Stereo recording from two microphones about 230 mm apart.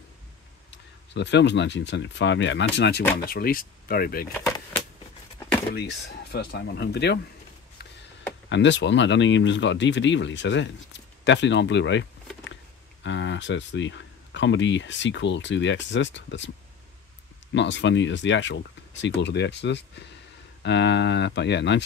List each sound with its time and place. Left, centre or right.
0.7 s speech: left
5.7 s speech: left
8.5 s speech: left
17.6 s speech: left